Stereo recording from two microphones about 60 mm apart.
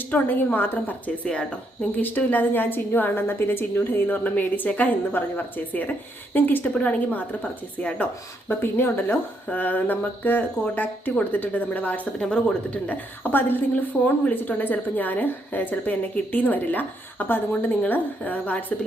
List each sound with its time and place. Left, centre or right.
0.0 s a woman's voice: left
6.3 s a woman's voice: left
13.2 s a woman's voice: left